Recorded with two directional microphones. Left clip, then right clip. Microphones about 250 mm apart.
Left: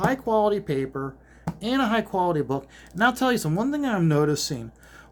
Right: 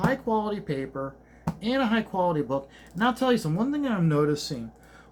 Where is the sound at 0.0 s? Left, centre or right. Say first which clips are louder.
Left 4 dB; left.